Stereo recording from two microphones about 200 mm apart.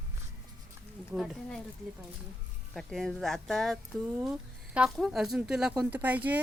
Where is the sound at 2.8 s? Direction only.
Centre (ahead or behind).